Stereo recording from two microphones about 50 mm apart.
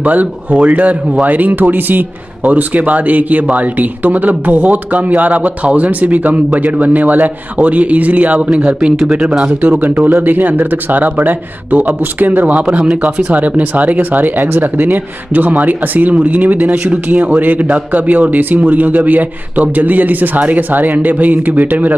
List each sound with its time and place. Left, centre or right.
0.0 s speech: right
8.4 s speech: right
9.4 s speech: right
9.8 s speech: right